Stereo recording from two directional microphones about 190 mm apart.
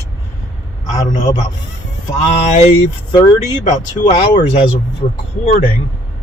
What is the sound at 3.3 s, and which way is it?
Speech, 40° left (ahead or behind).